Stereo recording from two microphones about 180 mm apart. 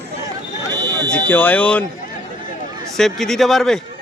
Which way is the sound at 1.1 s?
10° left (ahead or behind).